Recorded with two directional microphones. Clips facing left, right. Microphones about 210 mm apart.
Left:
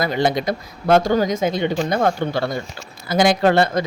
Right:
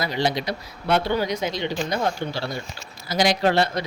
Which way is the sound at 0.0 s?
50° left (ahead or behind).